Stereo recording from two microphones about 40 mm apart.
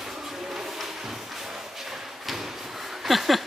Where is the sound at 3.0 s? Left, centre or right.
Centre.